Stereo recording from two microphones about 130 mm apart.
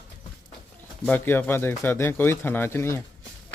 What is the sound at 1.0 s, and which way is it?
Speech, 15° left (ahead or behind).